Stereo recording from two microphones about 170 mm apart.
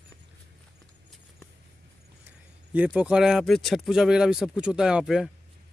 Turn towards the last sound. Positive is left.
turn(degrees=0)  # may be behind; listen again after turning